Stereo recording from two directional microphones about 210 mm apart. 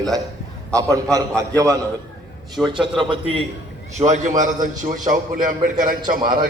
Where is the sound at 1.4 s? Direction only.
15° right (ahead or behind).